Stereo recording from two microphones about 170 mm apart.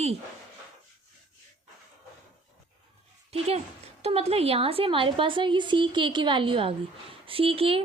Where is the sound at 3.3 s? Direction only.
35° right (ahead or behind).